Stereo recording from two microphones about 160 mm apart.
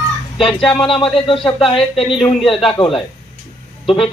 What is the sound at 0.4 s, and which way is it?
Speech, 5° left (ahead or behind).